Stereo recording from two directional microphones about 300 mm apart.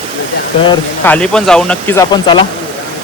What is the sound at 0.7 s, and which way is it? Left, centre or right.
Speech, centre.